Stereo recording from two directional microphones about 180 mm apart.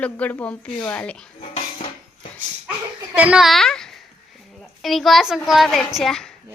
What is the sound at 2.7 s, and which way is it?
A child's voice, 10° right (ahead or behind).